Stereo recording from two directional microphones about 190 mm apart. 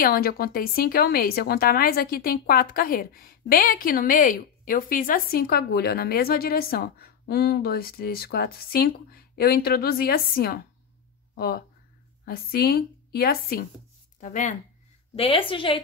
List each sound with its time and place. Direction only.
0.0 s a woman's voice: 55° left (ahead or behind)
14.2 s speech: 40° left (ahead or behind)
15.1 s a woman's voice: 30° left (ahead or behind)